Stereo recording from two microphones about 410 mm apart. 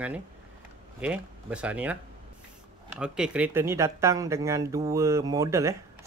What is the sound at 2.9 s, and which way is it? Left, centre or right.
Speech, centre.